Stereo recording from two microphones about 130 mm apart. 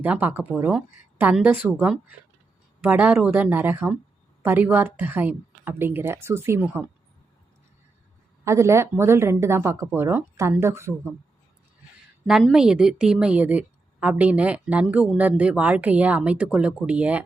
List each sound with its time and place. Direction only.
0.0 s a woman's voice: 15° right (ahead or behind)
8.4 s speech: 20° right (ahead or behind)
12.2 s a woman's voice: centre (ahead or behind)